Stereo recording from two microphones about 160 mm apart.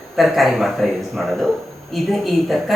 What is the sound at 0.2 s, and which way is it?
Speech, centre (ahead or behind).